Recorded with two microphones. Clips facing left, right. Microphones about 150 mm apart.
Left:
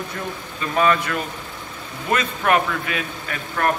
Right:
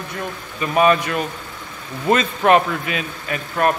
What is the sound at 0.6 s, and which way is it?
A man's voice, 20° right (ahead or behind).